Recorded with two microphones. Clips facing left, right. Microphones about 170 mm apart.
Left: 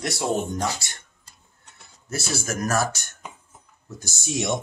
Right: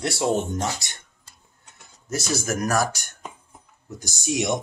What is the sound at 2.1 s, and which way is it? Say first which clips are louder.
Speech: right 3 dB; 15° right (ahead or behind).